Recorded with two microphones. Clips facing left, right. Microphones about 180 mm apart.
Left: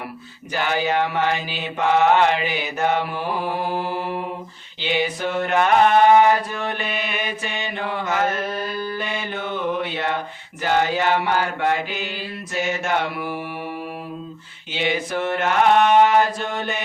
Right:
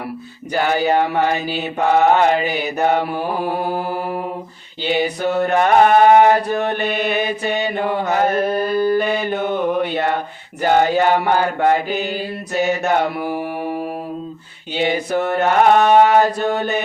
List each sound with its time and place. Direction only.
0.5 s mantra: 45° right (ahead or behind)
8.6 s mantra: 55° right (ahead or behind)
9.0 s mantra: 40° right (ahead or behind)